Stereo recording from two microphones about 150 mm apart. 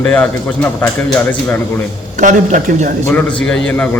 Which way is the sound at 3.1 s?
5° left (ahead or behind).